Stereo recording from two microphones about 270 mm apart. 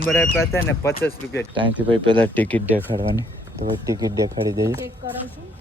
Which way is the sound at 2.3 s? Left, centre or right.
Centre.